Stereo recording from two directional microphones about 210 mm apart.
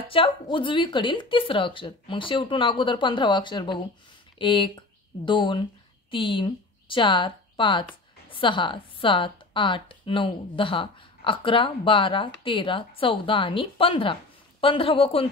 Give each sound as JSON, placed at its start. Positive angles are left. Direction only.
{"t": 0.1, "sound": "a woman's voice", "side_deg": 25}